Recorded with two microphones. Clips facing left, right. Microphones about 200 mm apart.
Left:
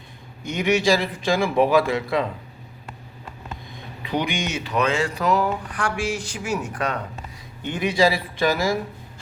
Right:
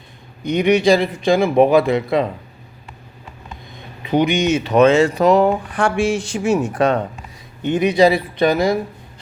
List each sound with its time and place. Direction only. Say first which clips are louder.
0.4 s speech: right 6 dB; 20° right (ahead or behind)
4.3 s speech: right 10 dB; 20° right (ahead or behind)